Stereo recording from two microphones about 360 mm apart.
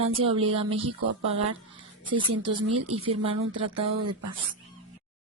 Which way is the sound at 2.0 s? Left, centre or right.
Centre.